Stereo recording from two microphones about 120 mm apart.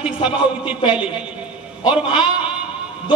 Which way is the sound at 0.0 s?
10° right (ahead or behind).